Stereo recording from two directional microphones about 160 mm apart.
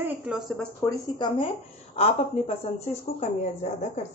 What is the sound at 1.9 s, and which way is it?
A woman's voice, 40° left (ahead or behind).